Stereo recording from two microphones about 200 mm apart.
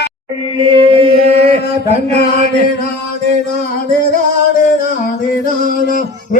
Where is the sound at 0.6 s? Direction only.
25° right (ahead or behind).